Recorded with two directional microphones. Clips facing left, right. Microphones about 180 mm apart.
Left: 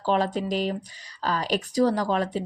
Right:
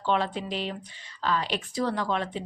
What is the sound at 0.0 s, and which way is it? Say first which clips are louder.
A woman's voice: left 3 dB; 40° left (ahead or behind).